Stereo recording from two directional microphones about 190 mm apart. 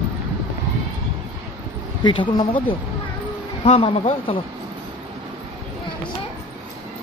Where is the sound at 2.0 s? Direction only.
25° left (ahead or behind).